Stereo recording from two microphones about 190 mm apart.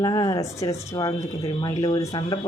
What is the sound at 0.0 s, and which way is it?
Speech, 20° left (ahead or behind).